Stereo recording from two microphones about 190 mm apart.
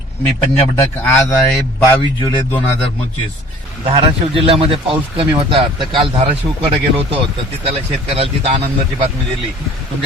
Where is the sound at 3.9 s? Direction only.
30° right (ahead or behind).